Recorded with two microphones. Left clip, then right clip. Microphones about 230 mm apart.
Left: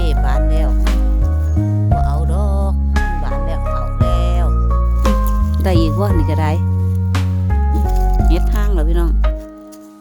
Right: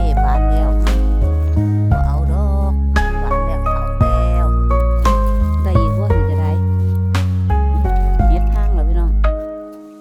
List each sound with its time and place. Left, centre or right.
0.0 s music: centre
3.9 s music: centre
5.6 s music: left